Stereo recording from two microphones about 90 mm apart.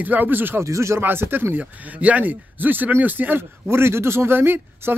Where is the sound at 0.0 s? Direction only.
20° right (ahead or behind).